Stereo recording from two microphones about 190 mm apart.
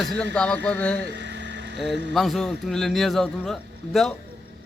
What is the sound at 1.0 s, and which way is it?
Vehicle, 65° right (ahead or behind).